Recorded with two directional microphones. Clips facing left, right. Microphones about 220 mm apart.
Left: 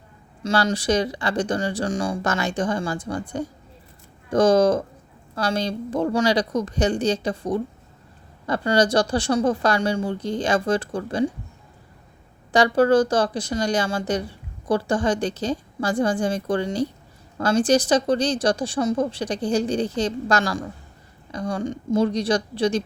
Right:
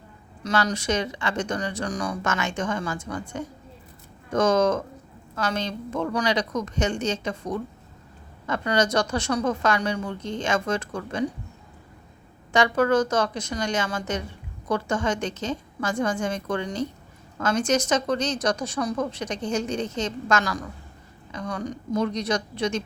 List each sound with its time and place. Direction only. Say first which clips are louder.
0.4 s a woman's voice: left 3 dB; 35° left (ahead or behind)
12.5 s a woman's voice: left 4 dB; 35° left (ahead or behind)